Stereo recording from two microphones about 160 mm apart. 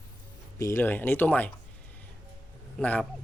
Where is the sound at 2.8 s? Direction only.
10° left (ahead or behind).